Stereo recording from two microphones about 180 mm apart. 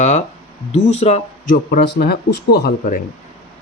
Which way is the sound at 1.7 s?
65° left (ahead or behind).